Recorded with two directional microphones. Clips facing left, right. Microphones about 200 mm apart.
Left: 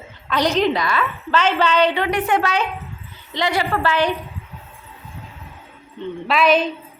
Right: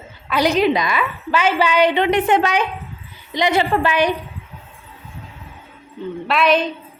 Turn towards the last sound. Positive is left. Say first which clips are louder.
# even
turn(degrees=0)  # may be behind; listen again after turning